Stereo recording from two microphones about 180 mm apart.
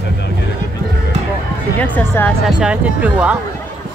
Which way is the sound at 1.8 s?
10° left (ahead or behind).